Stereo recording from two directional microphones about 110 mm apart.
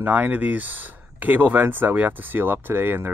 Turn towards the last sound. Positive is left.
turn(degrees=-20)  # may be behind; listen again after turning